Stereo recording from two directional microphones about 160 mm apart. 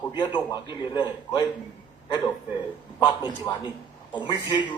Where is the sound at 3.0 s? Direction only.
25° left (ahead or behind).